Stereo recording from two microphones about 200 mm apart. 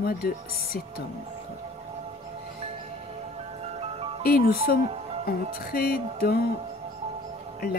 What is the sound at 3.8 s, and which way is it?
Music, 30° right (ahead or behind).